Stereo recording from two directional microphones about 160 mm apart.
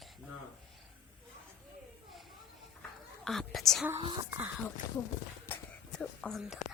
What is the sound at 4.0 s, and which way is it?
Speech, 30° right (ahead or behind).